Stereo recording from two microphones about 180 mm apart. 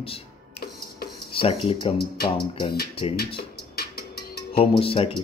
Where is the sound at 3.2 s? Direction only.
60° left (ahead or behind).